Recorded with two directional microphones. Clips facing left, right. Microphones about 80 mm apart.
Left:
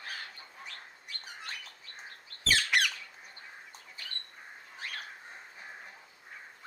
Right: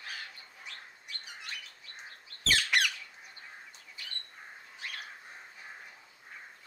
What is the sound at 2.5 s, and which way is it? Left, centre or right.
Squawk, centre.